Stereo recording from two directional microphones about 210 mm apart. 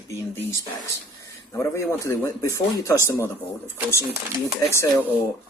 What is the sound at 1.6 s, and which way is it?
Speech, 15° left (ahead or behind).